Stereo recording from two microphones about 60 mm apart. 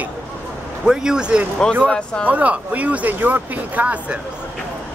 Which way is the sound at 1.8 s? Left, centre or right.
Centre.